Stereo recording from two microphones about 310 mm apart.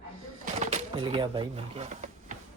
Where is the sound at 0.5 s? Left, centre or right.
Right.